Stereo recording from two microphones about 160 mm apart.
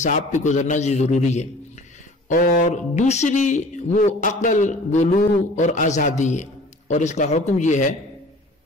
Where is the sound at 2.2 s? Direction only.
60° left (ahead or behind).